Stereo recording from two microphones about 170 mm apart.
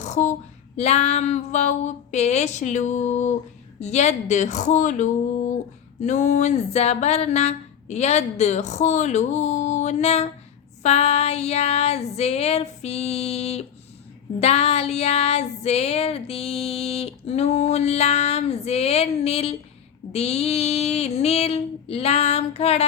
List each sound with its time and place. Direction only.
0.0 s a sound: 45° left (ahead or behind)
0.8 s speech: 40° left (ahead or behind)
6.0 s female singing: 40° left (ahead or behind)